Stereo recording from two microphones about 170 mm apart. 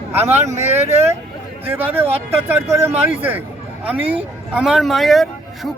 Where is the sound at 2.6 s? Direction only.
15° right (ahead or behind).